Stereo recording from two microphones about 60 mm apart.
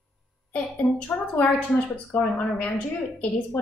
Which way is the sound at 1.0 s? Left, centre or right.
Left.